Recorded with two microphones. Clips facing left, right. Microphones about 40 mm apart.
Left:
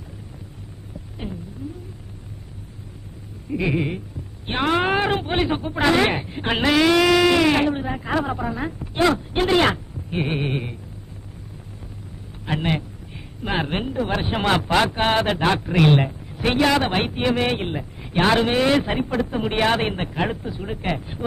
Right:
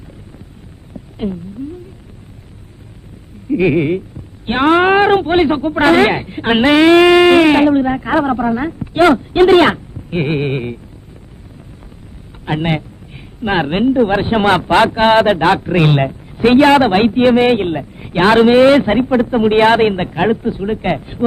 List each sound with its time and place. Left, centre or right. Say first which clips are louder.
1.2 s speech: right 12 dB; right
3.5 s a woman's voice: right 10 dB; right
4.4 s a woman's voice: right 9 dB; right
5.8 s speech: right 7 dB; right
7.8 s a woman's voice: right 10 dB; right
9.4 s a man's voice: right 10 dB; right
12.5 s speech: right 6 dB; right
15.6 s a woman's voice: right 5 dB; right
16.0 s speech: right 8 dB; right
17.7 s a sound: right 9 dB; right
18.2 s a woman's voice: right 10 dB; right